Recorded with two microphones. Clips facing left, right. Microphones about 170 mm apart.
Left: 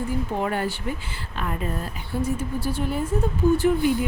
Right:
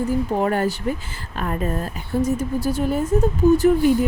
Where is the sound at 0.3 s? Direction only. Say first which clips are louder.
Right 5 dB; 40° right (ahead or behind).